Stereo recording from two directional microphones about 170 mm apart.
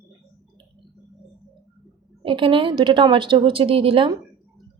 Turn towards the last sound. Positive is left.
turn(degrees=-30)  # may be behind; listen again after turning